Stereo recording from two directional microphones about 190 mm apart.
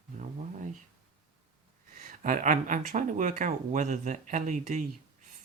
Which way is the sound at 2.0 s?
45° right (ahead or behind).